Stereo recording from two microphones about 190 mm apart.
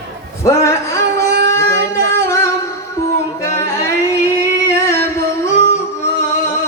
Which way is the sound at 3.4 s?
15° left (ahead or behind).